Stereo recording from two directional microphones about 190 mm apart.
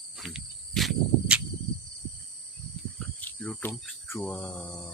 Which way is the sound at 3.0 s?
5° left (ahead or behind).